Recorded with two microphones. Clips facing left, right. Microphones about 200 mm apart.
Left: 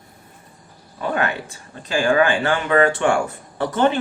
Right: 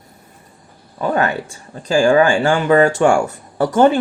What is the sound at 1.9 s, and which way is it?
Speech, 40° right (ahead or behind).